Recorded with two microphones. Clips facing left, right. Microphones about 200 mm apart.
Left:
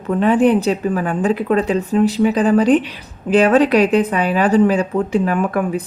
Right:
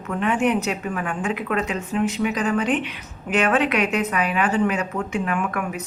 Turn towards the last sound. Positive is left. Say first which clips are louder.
# left 7 dB
turn(degrees=35)  # may be behind; listen again after turning